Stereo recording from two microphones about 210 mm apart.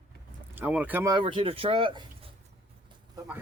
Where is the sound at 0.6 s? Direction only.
5° right (ahead or behind); by 2.0 s 25° right (ahead or behind).